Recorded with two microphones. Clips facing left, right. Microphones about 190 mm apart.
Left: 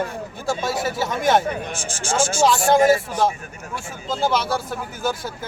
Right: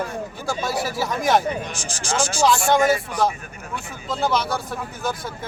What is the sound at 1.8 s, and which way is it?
Speech, 35° right (ahead or behind).